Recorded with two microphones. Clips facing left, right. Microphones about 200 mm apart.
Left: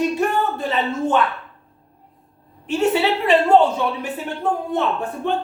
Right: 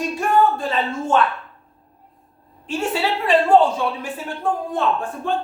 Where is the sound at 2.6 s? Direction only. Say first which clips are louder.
Left 4 dB; 20° left (ahead or behind).